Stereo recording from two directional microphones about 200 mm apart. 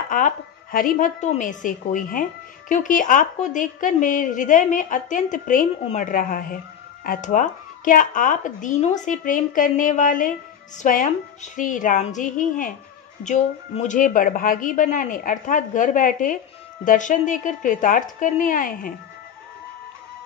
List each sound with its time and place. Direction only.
0.1 s a woman's voice: 45° left (ahead or behind)